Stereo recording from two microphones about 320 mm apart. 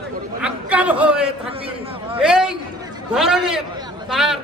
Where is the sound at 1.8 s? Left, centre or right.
Centre.